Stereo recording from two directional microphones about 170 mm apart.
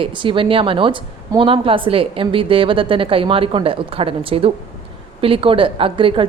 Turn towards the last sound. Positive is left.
turn(degrees=-30)  # may be behind; listen again after turning